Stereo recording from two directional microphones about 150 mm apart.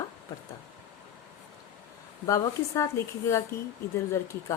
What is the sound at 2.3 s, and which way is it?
Speech, 20° left (ahead or behind).